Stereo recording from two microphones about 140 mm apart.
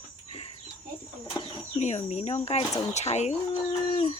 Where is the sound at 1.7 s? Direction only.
55° left (ahead or behind).